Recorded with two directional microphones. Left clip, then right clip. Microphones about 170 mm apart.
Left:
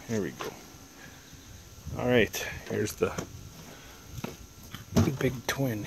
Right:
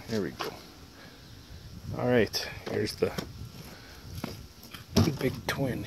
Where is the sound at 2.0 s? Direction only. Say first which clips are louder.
Left 1 dB; 15° left (ahead or behind).